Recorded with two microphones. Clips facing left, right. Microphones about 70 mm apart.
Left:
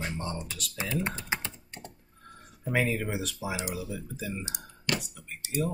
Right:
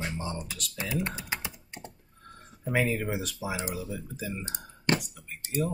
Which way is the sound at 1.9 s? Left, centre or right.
Centre.